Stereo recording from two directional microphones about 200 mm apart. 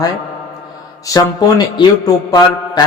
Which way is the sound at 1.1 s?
20° left (ahead or behind).